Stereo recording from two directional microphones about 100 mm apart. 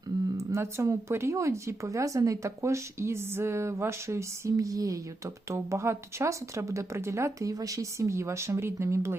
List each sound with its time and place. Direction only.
0.3 s speech: 30° right (ahead or behind)